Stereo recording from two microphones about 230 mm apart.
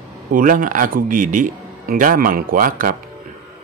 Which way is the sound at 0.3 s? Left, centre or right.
Right.